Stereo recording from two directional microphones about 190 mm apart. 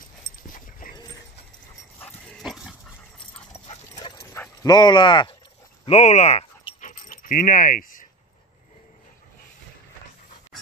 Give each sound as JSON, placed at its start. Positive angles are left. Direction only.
{"t": 0.4, "sound": "dog", "side_deg": 45}
{"t": 2.0, "sound": "dog", "side_deg": 5}
{"t": 3.5, "sound": "dog", "side_deg": 30}
{"t": 4.2, "sound": "dog", "side_deg": 15}
{"t": 5.9, "sound": "dog", "side_deg": 35}